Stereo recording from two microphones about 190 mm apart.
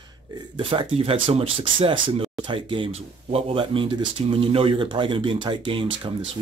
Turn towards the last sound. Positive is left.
turn(degrees=-25)  # may be behind; listen again after turning